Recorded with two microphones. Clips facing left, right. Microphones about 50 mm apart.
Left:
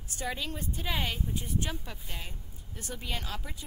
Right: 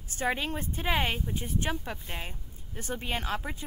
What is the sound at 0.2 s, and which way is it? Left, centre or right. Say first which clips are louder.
Speech: right 5 dB; right.